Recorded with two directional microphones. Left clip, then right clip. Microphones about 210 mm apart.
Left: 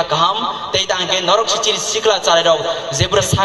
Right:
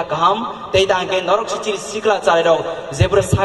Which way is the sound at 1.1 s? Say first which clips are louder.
Left 3 dB; 55° right (ahead or behind).